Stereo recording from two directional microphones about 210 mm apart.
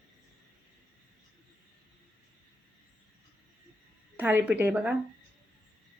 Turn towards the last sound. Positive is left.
turn(degrees=-5)  # may be behind; listen again after turning